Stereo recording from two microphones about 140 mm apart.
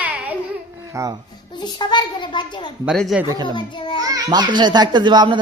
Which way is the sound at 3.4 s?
35° left (ahead or behind).